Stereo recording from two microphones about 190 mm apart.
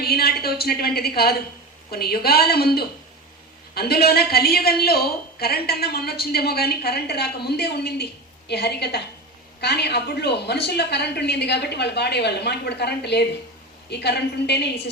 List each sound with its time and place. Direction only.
0.0 s a woman's voice: 55° left (ahead or behind)